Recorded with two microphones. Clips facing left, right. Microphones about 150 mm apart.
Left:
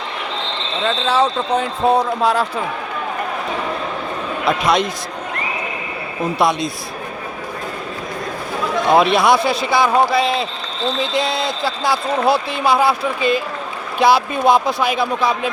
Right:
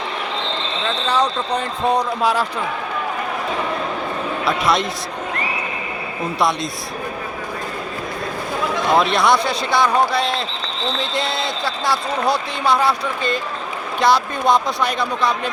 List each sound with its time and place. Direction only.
1.0 s speech: 5° left (ahead or behind)
4.4 s speech: centre (ahead or behind)
6.4 s speech: centre (ahead or behind)
9.0 s speech: centre (ahead or behind)